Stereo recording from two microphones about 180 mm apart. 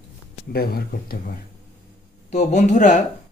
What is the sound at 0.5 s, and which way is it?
Speech, 55° left (ahead or behind).